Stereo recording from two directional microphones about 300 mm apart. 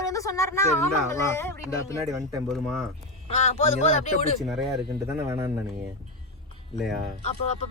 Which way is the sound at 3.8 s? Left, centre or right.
Left.